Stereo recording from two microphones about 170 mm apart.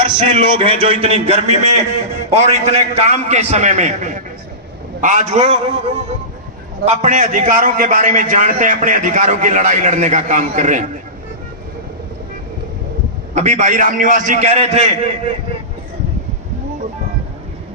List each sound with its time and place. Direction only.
0.3 s a man's voice: 30° right (ahead or behind); by 10.8 s 50° right (ahead or behind)
13.3 s a man's voice: 45° right (ahead or behind)